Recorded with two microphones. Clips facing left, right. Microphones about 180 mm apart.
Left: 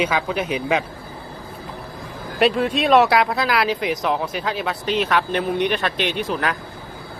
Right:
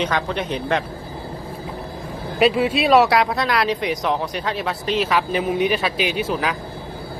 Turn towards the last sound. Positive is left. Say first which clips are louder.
# right 1 dB
turn(degrees=0)  # may be behind; listen again after turning